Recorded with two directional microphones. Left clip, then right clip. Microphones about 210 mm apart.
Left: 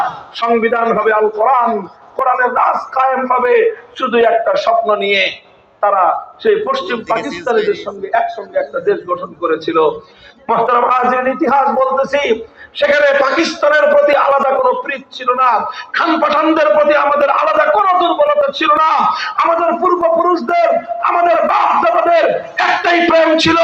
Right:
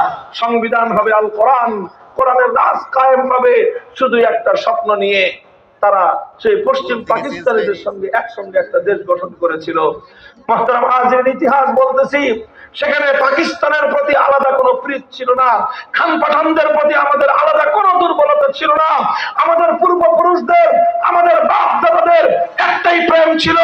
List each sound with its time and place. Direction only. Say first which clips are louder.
0.3 s a man's voice: left 1 dB; 30° right (ahead or behind)
7.1 s a man's voice: right 1 dB; 10° right (ahead or behind)
7.9 s a man's voice: left 1 dB; 30° right (ahead or behind)